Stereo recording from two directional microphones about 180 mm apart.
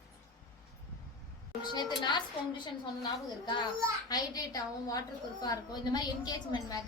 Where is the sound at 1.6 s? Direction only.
25° left (ahead or behind).